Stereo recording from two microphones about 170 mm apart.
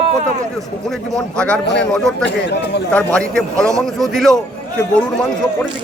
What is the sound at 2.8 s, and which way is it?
A man's voice, 5° left (ahead or behind).